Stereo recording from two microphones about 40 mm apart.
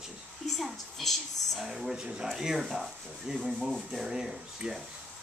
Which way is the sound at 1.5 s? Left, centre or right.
Centre.